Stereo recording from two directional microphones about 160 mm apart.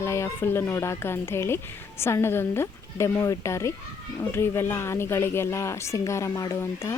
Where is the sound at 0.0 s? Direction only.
15° left (ahead or behind).